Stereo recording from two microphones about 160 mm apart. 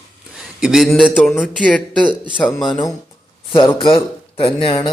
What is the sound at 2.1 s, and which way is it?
Speech, 30° right (ahead or behind).